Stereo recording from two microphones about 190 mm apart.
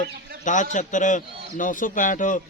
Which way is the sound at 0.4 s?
40° left (ahead or behind).